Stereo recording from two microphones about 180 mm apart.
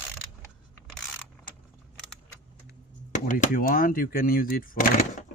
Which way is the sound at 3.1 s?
45° left (ahead or behind).